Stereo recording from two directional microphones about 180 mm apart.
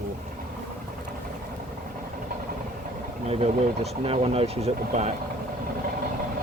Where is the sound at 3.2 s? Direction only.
35° right (ahead or behind).